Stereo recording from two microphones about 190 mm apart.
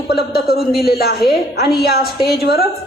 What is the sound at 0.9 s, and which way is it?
Speech, 55° left (ahead or behind).